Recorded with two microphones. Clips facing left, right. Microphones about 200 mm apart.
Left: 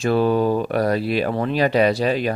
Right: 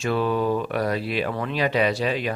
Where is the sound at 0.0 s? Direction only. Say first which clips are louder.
Left 5 dB; 40° left (ahead or behind).